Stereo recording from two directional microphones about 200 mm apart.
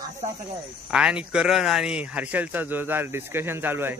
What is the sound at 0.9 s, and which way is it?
A man's voice, 5° right (ahead or behind).